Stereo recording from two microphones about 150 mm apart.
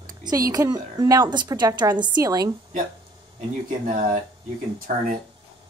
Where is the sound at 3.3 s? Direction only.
65° right (ahead or behind).